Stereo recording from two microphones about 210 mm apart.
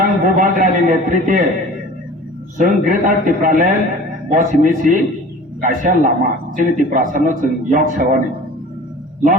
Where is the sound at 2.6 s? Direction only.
40° right (ahead or behind).